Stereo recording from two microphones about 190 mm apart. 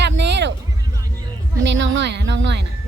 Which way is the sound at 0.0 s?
65° right (ahead or behind).